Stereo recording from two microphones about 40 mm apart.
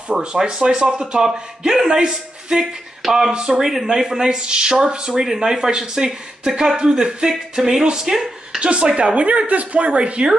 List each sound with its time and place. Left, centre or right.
0.4 s speech: centre
3.5 s speech: centre
8.5 s speech: right